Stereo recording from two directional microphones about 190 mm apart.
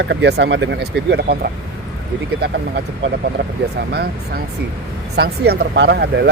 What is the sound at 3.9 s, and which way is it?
Speech, 55° right (ahead or behind).